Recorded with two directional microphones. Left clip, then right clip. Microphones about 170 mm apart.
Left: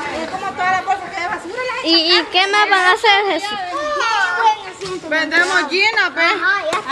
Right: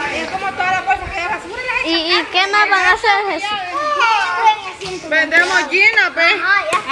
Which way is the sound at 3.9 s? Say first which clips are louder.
Right 4 dB; 65° left (ahead or behind).